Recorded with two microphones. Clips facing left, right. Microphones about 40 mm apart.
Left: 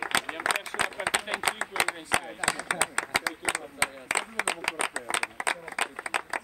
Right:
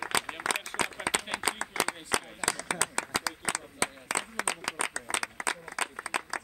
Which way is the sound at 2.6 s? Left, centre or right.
Left.